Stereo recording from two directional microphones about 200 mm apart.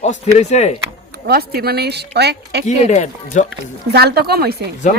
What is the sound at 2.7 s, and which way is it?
Speech, 35° left (ahead or behind).